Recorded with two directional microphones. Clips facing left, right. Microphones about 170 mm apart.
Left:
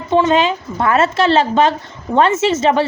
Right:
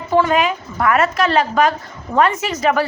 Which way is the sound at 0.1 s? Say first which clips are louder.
Left 2 dB; 25° left (ahead or behind).